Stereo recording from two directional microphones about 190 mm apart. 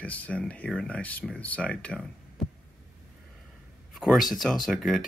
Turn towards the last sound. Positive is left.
turn(degrees=0)  # may be behind; listen again after turning